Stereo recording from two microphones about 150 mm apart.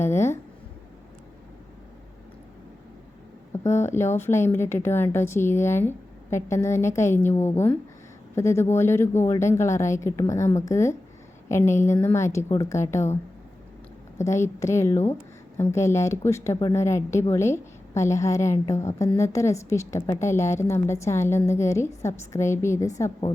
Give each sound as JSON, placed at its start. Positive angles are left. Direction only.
{"t": 0.0, "sound": "a sound", "side_deg": 15}
{"t": 3.5, "sound": "a woman's voice", "side_deg": 20}
{"t": 14.2, "sound": "a woman's voice", "side_deg": 20}